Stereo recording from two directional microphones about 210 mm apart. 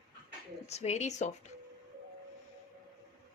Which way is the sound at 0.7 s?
30° left (ahead or behind).